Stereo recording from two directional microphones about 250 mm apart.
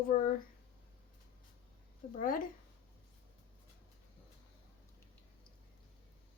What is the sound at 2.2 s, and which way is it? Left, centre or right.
Speech, left.